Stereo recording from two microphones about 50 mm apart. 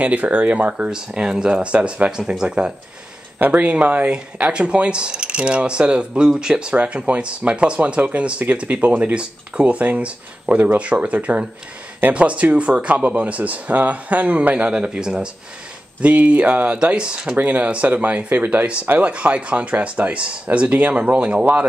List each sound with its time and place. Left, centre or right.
0.0 s speech: right
0.8 s speech: centre
2.0 s speech: centre
3.3 s speech: right
4.1 s speech: right
16.7 s speech: right
17.4 s speech: right